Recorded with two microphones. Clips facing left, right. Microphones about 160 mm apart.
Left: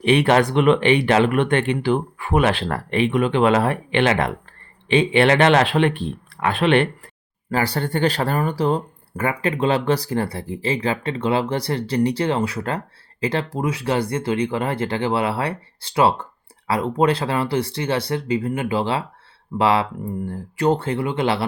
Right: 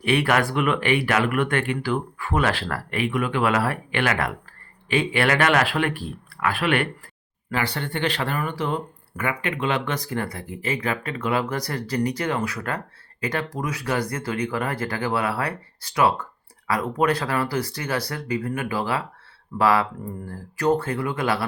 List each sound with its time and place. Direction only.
0.0 s speech: 20° left (ahead or behind)
7.5 s speech: 40° left (ahead or behind)